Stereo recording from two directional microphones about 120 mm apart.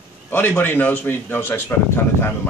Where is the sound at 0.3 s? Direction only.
15° left (ahead or behind).